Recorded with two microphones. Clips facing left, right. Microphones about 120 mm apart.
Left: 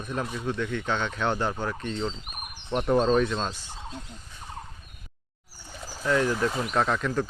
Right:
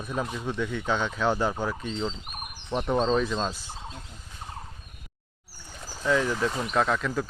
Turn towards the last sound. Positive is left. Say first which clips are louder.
# even
turn(degrees=0)  # may be behind; listen again after turning